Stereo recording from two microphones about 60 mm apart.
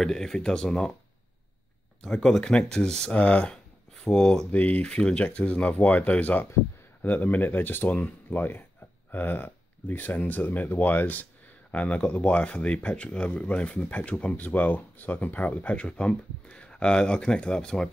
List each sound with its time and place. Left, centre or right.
0.0 s speech: centre
2.0 s speech: centre
3.9 s speech: centre
4.5 s speech: left